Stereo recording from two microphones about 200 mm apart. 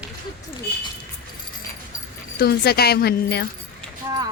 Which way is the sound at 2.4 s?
50° left (ahead or behind).